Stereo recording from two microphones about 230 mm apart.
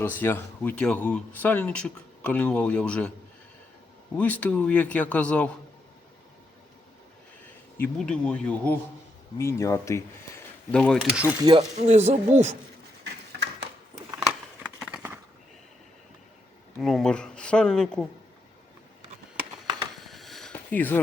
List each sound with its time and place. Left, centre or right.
0.0 s speech: centre
4.2 s speech: centre
7.8 s speech: centre
11.4 s speech: right
14.2 s a sound: centre
16.8 s speech: centre
20.0 s a sound: centre